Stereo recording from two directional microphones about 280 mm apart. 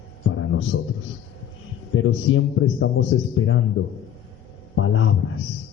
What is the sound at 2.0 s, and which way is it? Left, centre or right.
A man's voice, left.